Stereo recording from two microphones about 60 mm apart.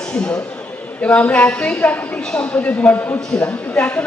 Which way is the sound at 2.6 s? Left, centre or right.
Left.